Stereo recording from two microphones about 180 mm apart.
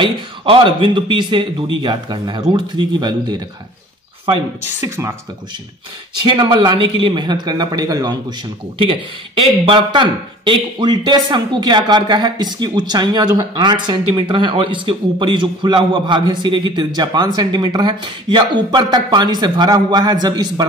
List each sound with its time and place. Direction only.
0.0 s speech: 30° right (ahead or behind)
4.7 s speech: 15° right (ahead or behind)
6.1 s speech: 25° right (ahead or behind)